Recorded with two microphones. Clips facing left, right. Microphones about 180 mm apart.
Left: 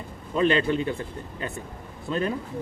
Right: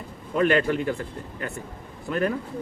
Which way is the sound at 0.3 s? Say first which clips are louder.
Right 1 dB; 20° left (ahead or behind).